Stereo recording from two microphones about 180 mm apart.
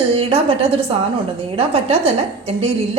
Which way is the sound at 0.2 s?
30° right (ahead or behind).